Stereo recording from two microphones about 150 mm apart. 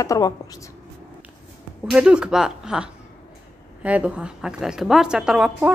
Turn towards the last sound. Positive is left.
turn(degrees=-5)  # may be behind; listen again after turning